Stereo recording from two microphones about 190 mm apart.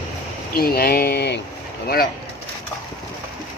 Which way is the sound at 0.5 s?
50° left (ahead or behind).